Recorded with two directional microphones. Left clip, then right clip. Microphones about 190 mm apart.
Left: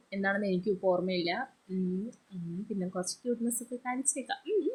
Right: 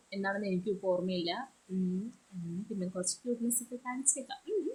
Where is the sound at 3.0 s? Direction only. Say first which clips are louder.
Left 2 dB; 15° left (ahead or behind).